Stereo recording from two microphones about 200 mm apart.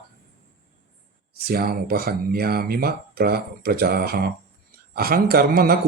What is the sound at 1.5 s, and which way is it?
Speech, 50° right (ahead or behind).